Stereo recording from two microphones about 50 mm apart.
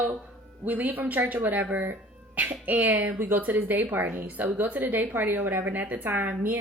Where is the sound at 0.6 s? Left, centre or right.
Right.